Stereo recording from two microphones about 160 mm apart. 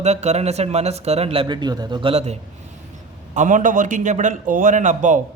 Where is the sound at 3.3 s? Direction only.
50° right (ahead or behind).